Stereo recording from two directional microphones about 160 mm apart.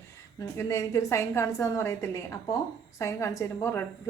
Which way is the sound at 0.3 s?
20° left (ahead or behind).